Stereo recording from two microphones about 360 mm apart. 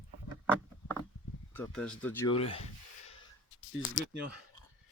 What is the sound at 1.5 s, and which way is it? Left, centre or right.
Speech, centre.